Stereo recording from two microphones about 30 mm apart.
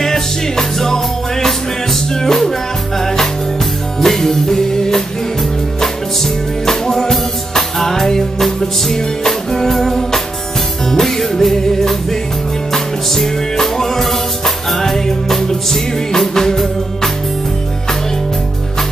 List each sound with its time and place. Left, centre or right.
0.0 s music: centre
12.7 s music: centre